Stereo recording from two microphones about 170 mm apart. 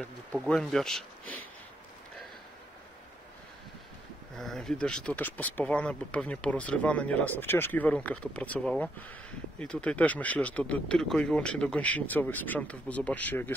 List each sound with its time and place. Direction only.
0.0 s speech: 5° left (ahead or behind)
4.4 s speech: centre (ahead or behind)